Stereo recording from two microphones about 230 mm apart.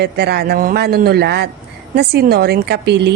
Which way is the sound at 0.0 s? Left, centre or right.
Right.